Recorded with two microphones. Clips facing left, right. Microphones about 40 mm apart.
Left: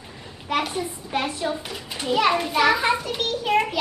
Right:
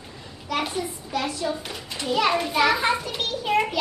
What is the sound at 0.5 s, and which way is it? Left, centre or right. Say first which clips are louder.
A child's voice: left 2 dB; left.